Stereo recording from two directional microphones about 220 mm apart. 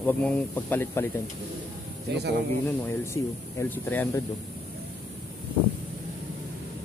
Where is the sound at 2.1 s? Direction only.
50° right (ahead or behind).